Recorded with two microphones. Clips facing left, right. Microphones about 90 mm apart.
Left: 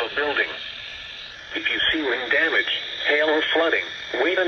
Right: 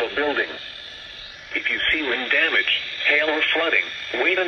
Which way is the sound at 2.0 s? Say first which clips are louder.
Left 2 dB; 20° left (ahead or behind).